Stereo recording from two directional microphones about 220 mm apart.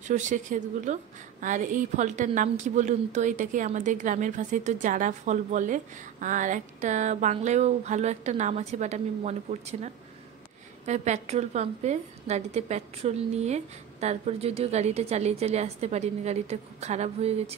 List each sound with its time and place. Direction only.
0.1 s a woman's voice: 35° right (ahead or behind)
10.9 s a woman's voice: 30° right (ahead or behind)